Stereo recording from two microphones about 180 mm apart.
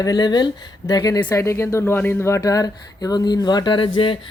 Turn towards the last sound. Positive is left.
turn(degrees=30)  # may be behind; listen again after turning